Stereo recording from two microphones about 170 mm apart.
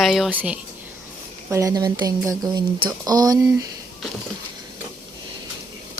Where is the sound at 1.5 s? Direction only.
20° right (ahead or behind).